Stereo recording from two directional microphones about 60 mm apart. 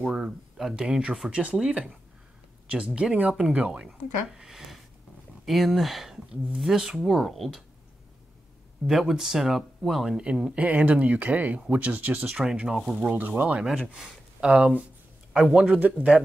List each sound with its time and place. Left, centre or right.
0.1 s speech: centre
3.0 s speech: centre
3.8 s speech: centre
8.8 s speech: centre; by 12.3 s right
12.3 s speech: centre
12.9 s speech: right
13.9 s speech: centre
15.8 s speech: right